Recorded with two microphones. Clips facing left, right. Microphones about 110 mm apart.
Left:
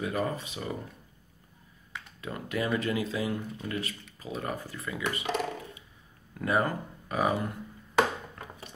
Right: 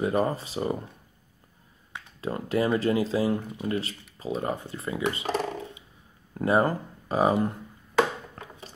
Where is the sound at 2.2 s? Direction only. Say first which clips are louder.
Right 6 dB; 30° right (ahead or behind).